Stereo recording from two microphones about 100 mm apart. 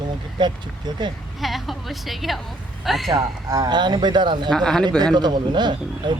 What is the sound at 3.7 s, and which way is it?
Speech, 50° right (ahead or behind).